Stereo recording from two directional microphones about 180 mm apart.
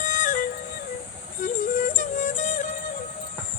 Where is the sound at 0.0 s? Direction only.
45° left (ahead or behind).